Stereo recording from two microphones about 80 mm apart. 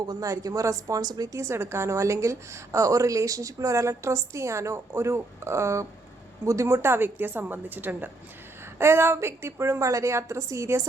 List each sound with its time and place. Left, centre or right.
0.0 s a woman's voice: right